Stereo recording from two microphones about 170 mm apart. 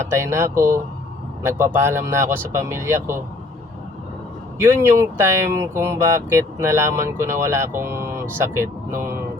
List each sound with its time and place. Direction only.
0.1 s speech: 15° right (ahead or behind)
4.5 s speech: 15° right (ahead or behind)